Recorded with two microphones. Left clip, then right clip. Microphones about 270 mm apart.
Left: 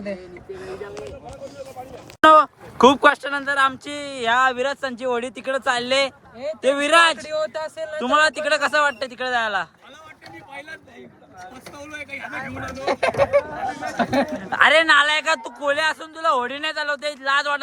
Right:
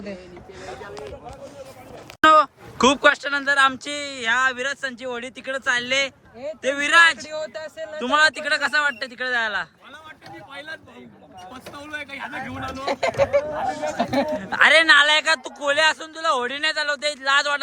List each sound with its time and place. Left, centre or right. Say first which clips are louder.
2.2 s speech: left 2 dB; centre
7.3 s speech: left 5 dB; left
7.9 s speech: even; centre
11.9 s a man's voice: even; centre
12.7 s speech: left 2 dB; left
14.3 s a man's voice: right 1 dB; centre